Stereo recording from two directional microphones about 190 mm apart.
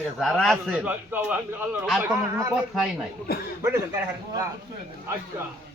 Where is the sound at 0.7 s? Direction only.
10° right (ahead or behind).